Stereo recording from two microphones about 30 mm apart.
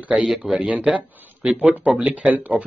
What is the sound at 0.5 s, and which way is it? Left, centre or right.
Speech, right.